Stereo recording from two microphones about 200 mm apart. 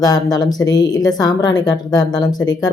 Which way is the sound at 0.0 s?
20° left (ahead or behind).